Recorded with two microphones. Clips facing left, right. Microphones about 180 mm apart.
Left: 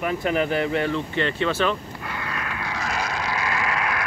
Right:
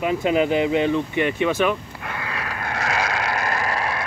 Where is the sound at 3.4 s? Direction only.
40° right (ahead or behind).